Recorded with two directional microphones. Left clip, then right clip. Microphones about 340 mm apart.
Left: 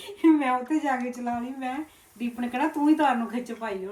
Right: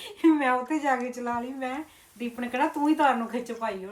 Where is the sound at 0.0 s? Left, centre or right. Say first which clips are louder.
Left 1 dB; centre.